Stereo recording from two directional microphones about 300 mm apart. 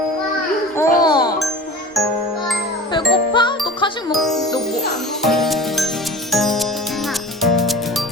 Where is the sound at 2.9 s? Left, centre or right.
Centre.